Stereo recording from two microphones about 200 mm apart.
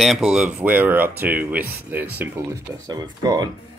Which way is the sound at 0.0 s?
Centre (ahead or behind).